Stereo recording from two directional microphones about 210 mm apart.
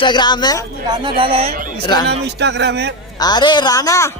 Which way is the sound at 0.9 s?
25° right (ahead or behind).